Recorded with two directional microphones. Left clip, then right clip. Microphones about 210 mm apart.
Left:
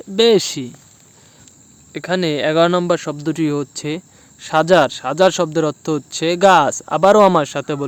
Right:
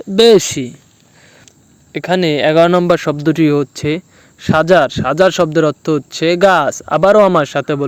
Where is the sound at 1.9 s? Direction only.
15° right (ahead or behind).